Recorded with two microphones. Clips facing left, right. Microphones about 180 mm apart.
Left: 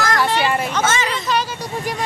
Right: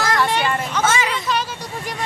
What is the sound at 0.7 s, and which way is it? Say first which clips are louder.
Speech: even; 10° right (ahead or behind).